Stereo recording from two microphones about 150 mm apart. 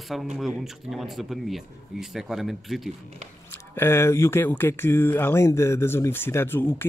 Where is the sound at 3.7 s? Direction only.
15° left (ahead or behind).